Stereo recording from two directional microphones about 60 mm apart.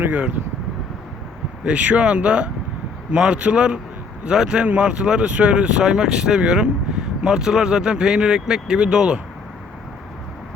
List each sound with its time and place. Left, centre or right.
0.1 s speech: right
1.6 s speech: right